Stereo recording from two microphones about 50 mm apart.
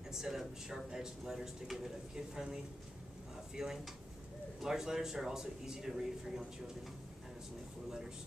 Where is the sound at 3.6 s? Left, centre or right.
Centre.